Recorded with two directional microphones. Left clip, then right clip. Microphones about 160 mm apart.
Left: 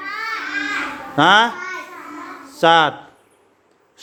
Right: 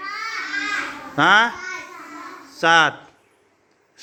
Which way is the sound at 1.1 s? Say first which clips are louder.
Left 2 dB; 20° left (ahead or behind).